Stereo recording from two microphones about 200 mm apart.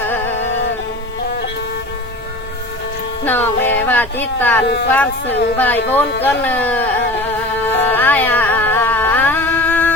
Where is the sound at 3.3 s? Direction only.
10° left (ahead or behind).